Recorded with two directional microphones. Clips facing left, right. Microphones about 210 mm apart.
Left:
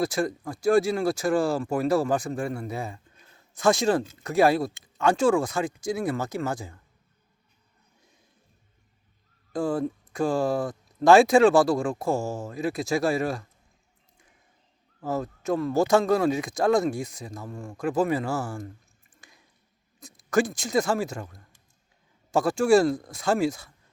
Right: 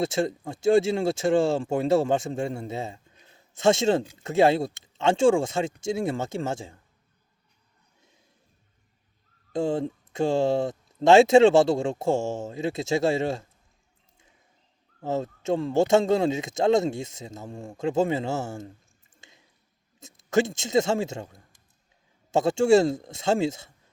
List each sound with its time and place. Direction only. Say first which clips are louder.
0.0 s speech: right 1 dB; 25° right (ahead or behind)
9.5 s speech: right 1 dB; 25° right (ahead or behind)
15.0 s speech: right 1 dB; 25° right (ahead or behind)
19.2 s a sound: right 1 dB; 25° right (ahead or behind)
20.0 s speech: even; 25° right (ahead or behind)